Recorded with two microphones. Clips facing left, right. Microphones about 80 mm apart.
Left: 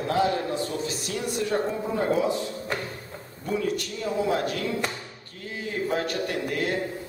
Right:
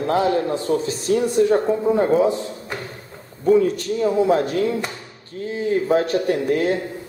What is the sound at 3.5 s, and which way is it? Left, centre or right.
Speech, right.